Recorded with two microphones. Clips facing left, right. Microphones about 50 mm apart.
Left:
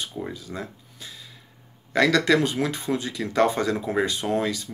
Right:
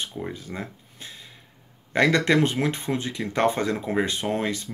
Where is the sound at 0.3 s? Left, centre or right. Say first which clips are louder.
Even; right.